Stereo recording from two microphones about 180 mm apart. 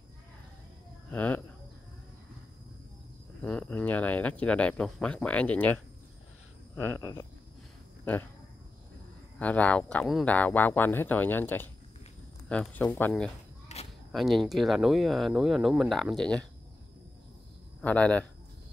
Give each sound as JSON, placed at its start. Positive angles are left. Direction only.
{"t": 1.1, "sound": "speech", "side_deg": 10}
{"t": 3.4, "sound": "speech", "side_deg": 5}
{"t": 7.0, "sound": "a sound", "side_deg": 20}
{"t": 8.0, "sound": "speech", "side_deg": 10}
{"t": 9.4, "sound": "speech", "side_deg": 5}
{"t": 13.7, "sound": "a sound", "side_deg": 35}
{"t": 14.1, "sound": "speech", "side_deg": 0}
{"t": 17.8, "sound": "speech", "side_deg": 10}